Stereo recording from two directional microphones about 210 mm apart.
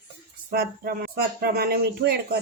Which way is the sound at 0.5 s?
45° right (ahead or behind).